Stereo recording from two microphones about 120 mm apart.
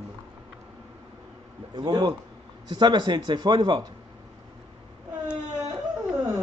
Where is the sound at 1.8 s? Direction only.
35° right (ahead or behind).